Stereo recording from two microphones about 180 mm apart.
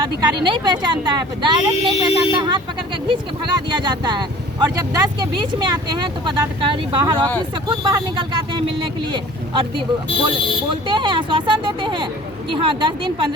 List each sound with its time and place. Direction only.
0.0 s speech: 25° right (ahead or behind)
3.7 s speech: 25° right (ahead or behind)
10.8 s speech: 25° right (ahead or behind)